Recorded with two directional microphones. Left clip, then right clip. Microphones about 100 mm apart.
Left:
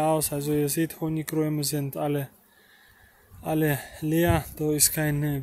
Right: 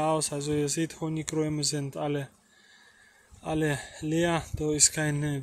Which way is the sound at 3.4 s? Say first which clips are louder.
Left 3 dB; 30° left (ahead or behind).